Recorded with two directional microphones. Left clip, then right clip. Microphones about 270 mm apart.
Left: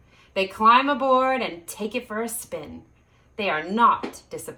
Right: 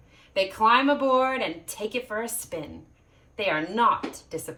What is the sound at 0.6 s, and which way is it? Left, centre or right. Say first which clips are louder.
Speech: left 3 dB; centre.